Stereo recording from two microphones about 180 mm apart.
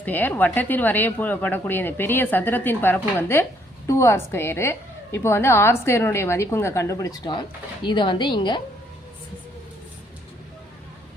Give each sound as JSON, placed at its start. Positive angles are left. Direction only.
{"t": 0.0, "sound": "a woman's voice", "side_deg": 10}